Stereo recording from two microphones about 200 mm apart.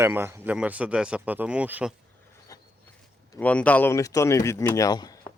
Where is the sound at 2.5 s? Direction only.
15° left (ahead or behind).